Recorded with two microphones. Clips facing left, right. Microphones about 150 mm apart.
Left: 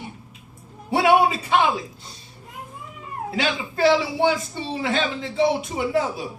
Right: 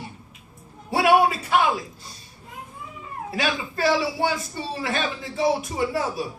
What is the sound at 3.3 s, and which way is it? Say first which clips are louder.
A woman's voice: left 1 dB; 25° left (ahead or behind).